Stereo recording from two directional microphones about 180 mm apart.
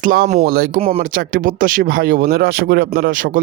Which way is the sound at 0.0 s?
50° right (ahead or behind).